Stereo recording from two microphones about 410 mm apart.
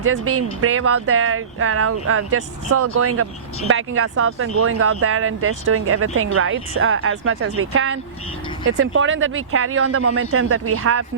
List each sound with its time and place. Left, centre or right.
0.0 s speech: right